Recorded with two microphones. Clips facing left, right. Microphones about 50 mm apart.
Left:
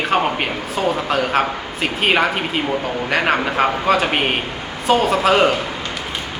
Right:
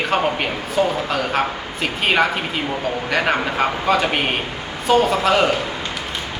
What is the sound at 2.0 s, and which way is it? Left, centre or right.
Speech, centre.